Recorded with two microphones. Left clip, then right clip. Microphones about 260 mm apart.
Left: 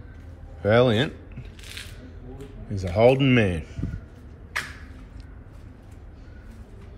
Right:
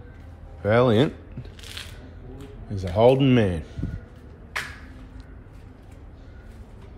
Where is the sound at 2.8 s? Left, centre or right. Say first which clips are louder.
Right 1 dB; centre.